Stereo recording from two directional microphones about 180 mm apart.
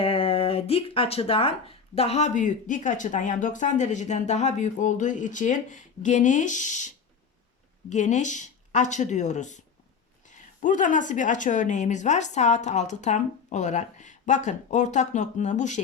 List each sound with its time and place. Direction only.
0.0 s speech: 30° left (ahead or behind)